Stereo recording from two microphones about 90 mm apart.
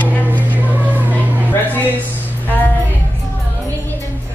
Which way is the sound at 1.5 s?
20° left (ahead or behind).